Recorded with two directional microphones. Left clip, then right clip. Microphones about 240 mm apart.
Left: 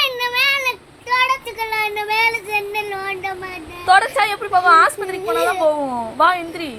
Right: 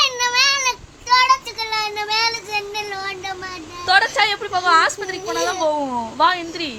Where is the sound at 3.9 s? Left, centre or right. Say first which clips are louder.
Left 2 dB; centre.